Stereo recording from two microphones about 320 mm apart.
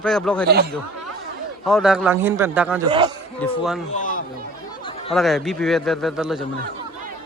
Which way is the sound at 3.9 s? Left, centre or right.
Left.